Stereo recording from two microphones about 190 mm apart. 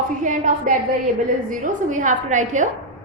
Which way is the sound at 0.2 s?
40° right (ahead or behind).